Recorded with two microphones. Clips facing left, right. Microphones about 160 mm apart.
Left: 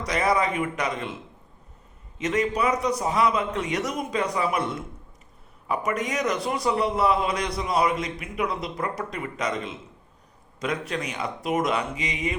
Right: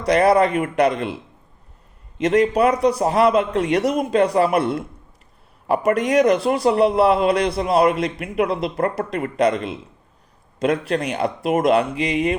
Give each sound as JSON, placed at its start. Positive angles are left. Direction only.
{"t": 0.0, "sound": "a man's voice", "side_deg": -60}
{"t": 2.1, "sound": "a man's voice", "side_deg": -65}